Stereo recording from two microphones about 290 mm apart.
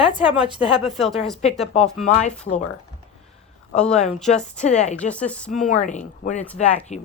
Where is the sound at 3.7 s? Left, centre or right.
Centre.